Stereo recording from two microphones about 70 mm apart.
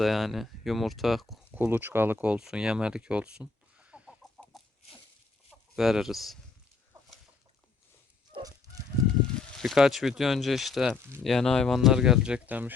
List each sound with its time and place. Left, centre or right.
0.0 s speech: centre
1.5 s speech: right
2.4 s speech: centre
4.5 s chicken: centre
5.7 s speech: centre
8.4 s goose: right
9.2 s a sound: centre
9.7 s speech: centre
12.5 s speech: right